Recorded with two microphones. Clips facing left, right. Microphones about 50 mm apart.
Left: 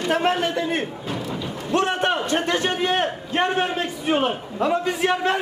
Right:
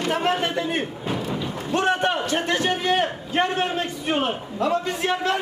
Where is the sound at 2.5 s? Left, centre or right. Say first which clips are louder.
Even; centre.